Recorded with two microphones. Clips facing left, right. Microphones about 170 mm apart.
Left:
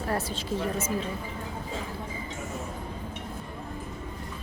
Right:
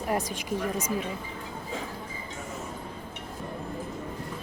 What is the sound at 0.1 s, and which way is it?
Speech, 15° right (ahead or behind).